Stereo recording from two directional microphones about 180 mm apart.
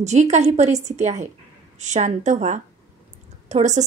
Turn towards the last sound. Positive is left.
turn(degrees=-40)  # may be behind; listen again after turning